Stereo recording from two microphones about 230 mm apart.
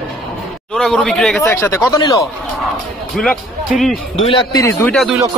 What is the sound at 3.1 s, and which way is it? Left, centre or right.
Speech, centre.